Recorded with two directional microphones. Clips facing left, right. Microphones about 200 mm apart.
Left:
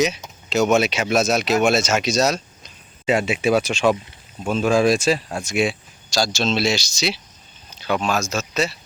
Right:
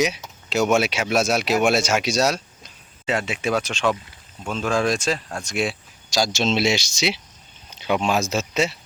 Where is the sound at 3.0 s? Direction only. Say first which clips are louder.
Left 5 dB; 10° left (ahead or behind).